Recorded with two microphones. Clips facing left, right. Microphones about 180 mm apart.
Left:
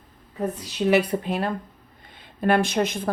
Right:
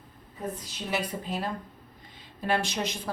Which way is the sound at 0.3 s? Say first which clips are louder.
Left 9 dB; 70° left (ahead or behind).